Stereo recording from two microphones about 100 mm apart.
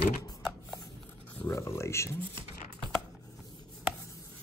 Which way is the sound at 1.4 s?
30° left (ahead or behind).